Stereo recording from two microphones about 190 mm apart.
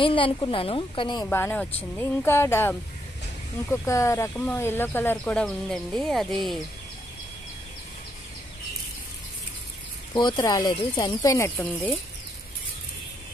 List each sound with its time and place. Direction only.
0.0 s speech: 25° left (ahead or behind)
1.2 s speech: 10° left (ahead or behind)
10.1 s speech: 20° left (ahead or behind); by 12.0 s 5° left (ahead or behind)